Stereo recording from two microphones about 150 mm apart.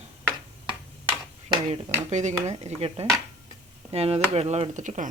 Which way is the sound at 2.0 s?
50° right (ahead or behind).